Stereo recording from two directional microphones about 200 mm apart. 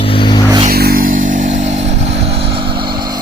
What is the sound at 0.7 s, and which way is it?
Vehicle, 50° right (ahead or behind).